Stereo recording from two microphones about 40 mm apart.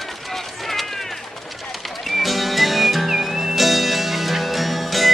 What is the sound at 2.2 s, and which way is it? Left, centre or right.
Music, centre.